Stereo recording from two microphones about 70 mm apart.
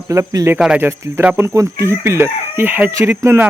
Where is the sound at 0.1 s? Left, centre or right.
Right.